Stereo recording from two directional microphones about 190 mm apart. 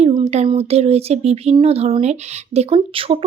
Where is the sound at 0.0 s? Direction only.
30° right (ahead or behind).